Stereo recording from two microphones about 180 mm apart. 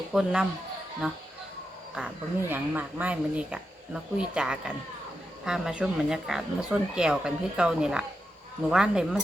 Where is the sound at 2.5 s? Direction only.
10° right (ahead or behind).